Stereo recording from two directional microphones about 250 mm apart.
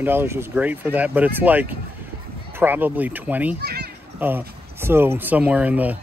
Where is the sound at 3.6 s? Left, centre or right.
Right.